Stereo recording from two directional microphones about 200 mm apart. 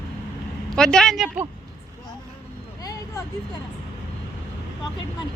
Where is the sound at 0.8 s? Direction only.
5° left (ahead or behind).